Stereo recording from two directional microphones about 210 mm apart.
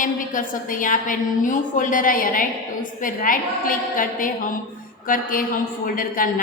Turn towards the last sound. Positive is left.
turn(degrees=40)  # may be behind; listen again after turning